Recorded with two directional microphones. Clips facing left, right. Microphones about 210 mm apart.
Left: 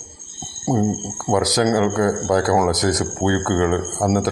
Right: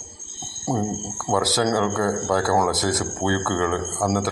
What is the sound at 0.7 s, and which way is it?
Speech, 10° left (ahead or behind).